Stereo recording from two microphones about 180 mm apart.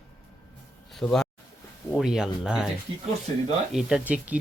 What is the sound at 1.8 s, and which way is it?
Speech, centre (ahead or behind).